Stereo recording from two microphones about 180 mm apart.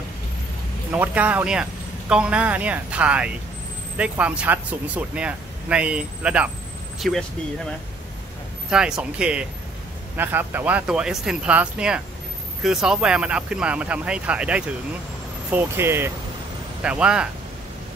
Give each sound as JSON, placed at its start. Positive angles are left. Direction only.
{"t": 0.9, "sound": "speech", "side_deg": -10}
{"t": 8.6, "sound": "speech", "side_deg": -5}